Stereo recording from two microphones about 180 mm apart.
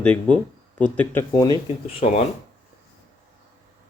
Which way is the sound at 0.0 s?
5° left (ahead or behind).